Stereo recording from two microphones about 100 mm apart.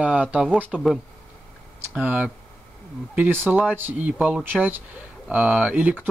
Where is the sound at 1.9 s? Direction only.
15° right (ahead or behind).